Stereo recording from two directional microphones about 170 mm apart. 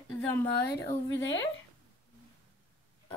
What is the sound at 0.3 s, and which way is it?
Speech, 10° left (ahead or behind).